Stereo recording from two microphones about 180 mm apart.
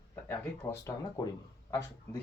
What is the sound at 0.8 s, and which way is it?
Speech, 20° left (ahead or behind).